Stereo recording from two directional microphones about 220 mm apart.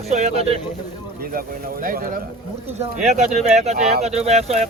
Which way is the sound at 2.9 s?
30° right (ahead or behind).